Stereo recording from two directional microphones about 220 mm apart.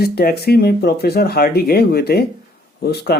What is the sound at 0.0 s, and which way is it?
Speech, 45° left (ahead or behind).